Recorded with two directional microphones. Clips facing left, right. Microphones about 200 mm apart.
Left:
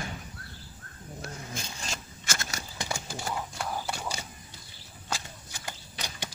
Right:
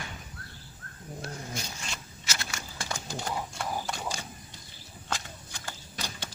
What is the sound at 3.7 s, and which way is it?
Horse, 15° right (ahead or behind).